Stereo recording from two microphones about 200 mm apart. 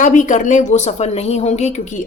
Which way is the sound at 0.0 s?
40° left (ahead or behind).